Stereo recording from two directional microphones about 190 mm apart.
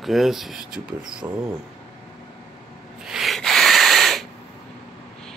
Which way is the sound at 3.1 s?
Centre (ahead or behind).